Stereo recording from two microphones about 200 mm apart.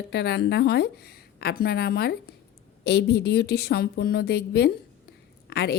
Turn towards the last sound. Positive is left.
turn(degrees=55)  # may be behind; listen again after turning